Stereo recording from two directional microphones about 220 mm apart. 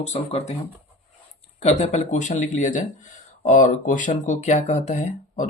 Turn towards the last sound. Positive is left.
turn(degrees=30)  # may be behind; listen again after turning